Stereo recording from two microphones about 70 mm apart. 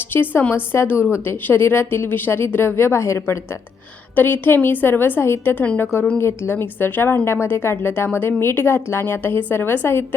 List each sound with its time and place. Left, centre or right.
0.1 s a woman's voice: left
5.5 s a woman's voice: left
6.1 s speech: left